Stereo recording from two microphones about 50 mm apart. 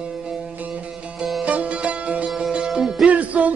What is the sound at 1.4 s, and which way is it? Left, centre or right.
Music, right.